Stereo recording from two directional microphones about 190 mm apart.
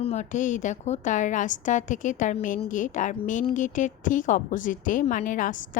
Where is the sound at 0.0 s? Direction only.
35° left (ahead or behind).